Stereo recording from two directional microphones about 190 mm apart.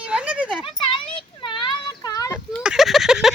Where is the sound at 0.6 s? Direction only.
25° left (ahead or behind).